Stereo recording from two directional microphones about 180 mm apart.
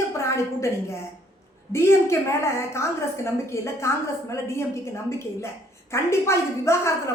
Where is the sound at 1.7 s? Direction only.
15° left (ahead or behind).